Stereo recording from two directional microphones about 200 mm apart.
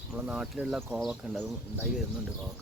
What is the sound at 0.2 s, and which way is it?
Speech, 5° right (ahead or behind).